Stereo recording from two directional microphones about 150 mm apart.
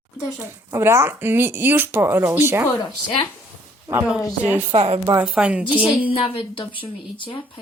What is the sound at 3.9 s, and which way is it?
Speech, 20° right (ahead or behind).